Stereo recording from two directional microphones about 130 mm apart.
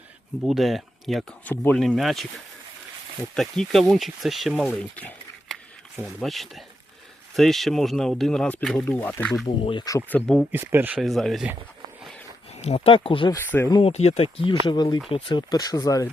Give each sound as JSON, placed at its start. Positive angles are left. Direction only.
{"t": 0.4, "sound": "speech", "side_deg": 0}
{"t": 1.5, "sound": "speech", "side_deg": 10}
{"t": 1.9, "sound": "speech", "side_deg": 0}
{"t": 3.3, "sound": "speech", "side_deg": 5}
{"t": 6.2, "sound": "speech", "side_deg": 0}
{"t": 9.2, "sound": "speech", "side_deg": 0}
{"t": 10.5, "sound": "speech", "side_deg": -15}
{"t": 11.0, "sound": "speech", "side_deg": 0}
{"t": 12.6, "sound": "speech", "side_deg": 50}
{"t": 13.3, "sound": "speech", "side_deg": 15}
{"t": 13.8, "sound": "speech", "side_deg": 55}